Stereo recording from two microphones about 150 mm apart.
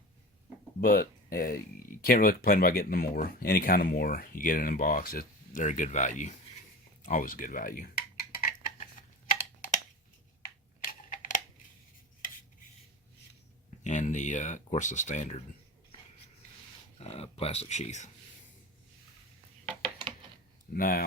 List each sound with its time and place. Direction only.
0.8 s speech: 80° left; by 6.3 s 55° left (ahead or behind)
7.0 s a sound: 60° left (ahead or behind)
10.4 s computer keyboard: 60° left (ahead or behind)
13.8 s speech: 55° left (ahead or behind)
17.0 s speech: 40° left (ahead or behind)
20.7 s speech: 70° left (ahead or behind)